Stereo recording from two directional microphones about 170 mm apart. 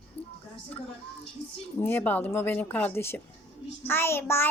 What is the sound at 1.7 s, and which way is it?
A child's voice, 10° left (ahead or behind).